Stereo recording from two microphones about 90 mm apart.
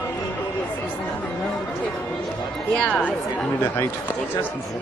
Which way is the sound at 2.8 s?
20° left (ahead or behind).